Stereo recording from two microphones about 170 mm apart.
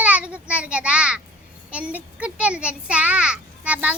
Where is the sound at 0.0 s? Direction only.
5° right (ahead or behind).